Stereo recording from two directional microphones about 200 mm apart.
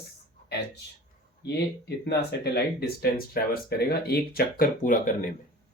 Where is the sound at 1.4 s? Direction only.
55° left (ahead or behind); by 5.1 s 40° left (ahead or behind).